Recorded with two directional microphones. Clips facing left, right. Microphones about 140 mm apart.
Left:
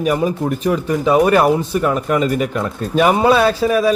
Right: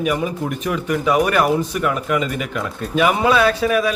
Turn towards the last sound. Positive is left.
turn(degrees=35)  # may be behind; listen again after turning